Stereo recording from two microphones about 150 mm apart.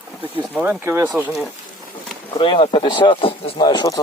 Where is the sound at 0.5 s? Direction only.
10° right (ahead or behind).